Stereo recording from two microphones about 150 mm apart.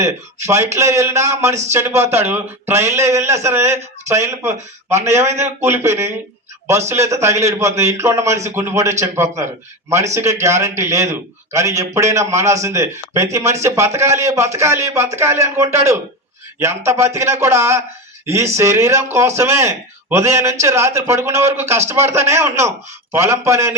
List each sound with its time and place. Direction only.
0.0 s a man's voice: 20° right (ahead or behind)